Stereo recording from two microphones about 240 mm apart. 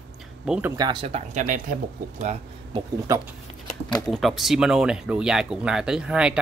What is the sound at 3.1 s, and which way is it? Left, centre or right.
Speech, centre.